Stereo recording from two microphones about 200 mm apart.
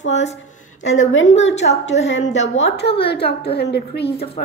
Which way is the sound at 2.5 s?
65° left (ahead or behind).